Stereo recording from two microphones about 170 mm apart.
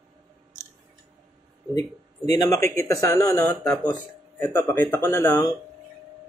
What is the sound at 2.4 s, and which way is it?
A man's voice, 15° left (ahead or behind).